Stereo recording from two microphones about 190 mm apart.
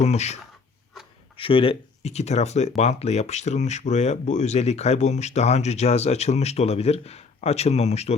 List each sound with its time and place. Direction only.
0.0 s speech: 35° left (ahead or behind)
1.4 s speech: 30° left (ahead or behind)